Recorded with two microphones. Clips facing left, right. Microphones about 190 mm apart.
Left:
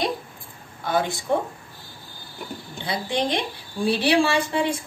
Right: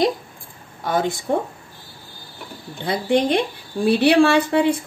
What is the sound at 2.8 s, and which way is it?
A woman's voice, 55° right (ahead or behind).